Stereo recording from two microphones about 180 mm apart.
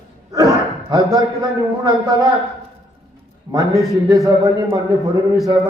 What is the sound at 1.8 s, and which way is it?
Speech, 20° right (ahead or behind).